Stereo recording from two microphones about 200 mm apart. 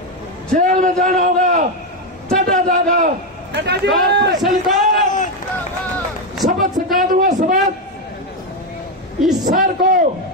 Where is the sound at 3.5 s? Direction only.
55° right (ahead or behind).